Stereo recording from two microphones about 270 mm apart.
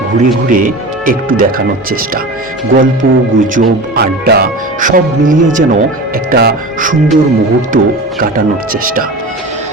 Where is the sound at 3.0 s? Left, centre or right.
Right.